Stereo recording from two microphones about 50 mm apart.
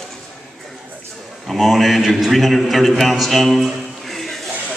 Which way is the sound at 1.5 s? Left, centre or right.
Centre.